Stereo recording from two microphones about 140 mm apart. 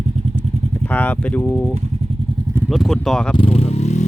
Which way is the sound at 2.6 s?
Centre (ahead or behind).